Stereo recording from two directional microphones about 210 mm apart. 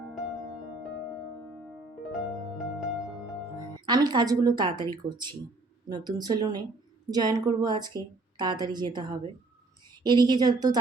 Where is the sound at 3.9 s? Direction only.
20° right (ahead or behind).